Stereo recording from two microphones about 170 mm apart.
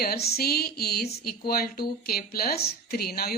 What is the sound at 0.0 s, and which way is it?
A woman's voice, 65° left (ahead or behind).